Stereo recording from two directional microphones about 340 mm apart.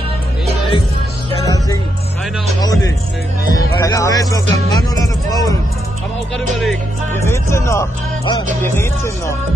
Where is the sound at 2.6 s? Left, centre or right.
Centre.